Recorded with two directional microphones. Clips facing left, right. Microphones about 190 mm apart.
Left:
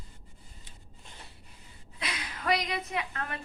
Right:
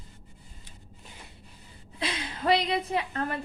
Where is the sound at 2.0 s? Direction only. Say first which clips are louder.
Right 6 dB; 30° right (ahead or behind).